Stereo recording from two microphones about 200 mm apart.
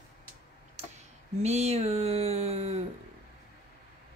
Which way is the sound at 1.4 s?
30° right (ahead or behind).